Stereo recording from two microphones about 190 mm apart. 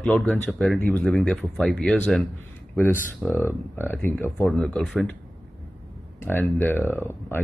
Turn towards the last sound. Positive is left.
turn(degrees=10)  # may be behind; listen again after turning